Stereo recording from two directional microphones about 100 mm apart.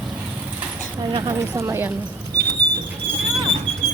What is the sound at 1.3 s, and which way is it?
Speech, 30° right (ahead or behind).